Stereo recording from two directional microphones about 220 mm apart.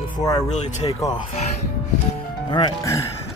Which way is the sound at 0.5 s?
30° left (ahead or behind).